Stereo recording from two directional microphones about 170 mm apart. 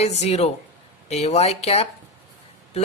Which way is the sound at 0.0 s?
40° left (ahead or behind).